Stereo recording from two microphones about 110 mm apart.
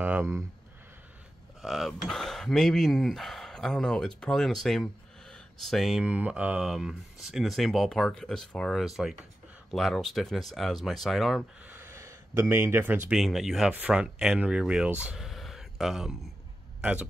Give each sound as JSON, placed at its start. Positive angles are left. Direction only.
{"t": 0.0, "sound": "speech", "side_deg": -20}
{"t": 1.6, "sound": "speech", "side_deg": 0}
{"t": 11.6, "sound": "gasp", "side_deg": -20}
{"t": 13.1, "sound": "speech", "side_deg": 0}